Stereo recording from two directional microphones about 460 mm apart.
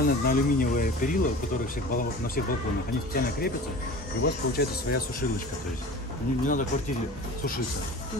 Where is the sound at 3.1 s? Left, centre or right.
Centre.